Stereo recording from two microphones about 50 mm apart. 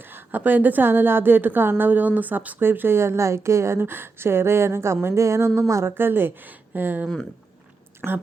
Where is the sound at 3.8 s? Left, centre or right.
Right.